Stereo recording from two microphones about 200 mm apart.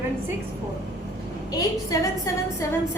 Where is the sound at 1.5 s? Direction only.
15° left (ahead or behind).